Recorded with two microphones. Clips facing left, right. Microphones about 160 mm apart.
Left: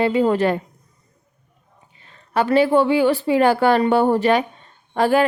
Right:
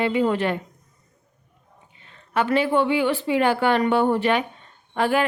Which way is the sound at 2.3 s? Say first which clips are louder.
Left 5 dB; 35° left (ahead or behind).